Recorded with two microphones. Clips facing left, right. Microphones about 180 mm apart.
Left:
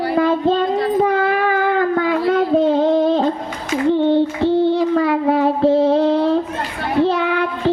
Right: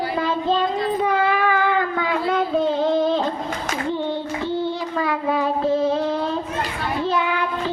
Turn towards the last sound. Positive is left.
turn(degrees=65)  # may be behind; listen again after turning